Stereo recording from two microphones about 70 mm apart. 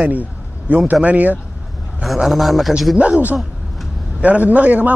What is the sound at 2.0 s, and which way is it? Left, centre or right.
Speech, centre.